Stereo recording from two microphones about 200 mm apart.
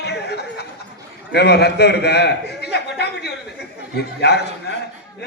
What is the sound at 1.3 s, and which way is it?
A man's voice, 55° left (ahead or behind).